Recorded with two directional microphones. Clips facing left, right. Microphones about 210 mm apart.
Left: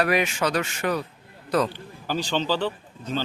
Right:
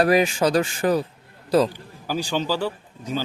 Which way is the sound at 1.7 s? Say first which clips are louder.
Right 1 dB; 10° right (ahead or behind).